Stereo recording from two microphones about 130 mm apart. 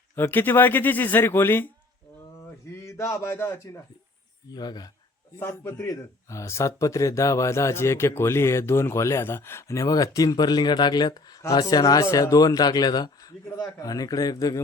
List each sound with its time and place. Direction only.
0.2 s a man's voice: 15° left (ahead or behind)
4.5 s speech: 30° left (ahead or behind)
5.4 s speech: 20° left (ahead or behind)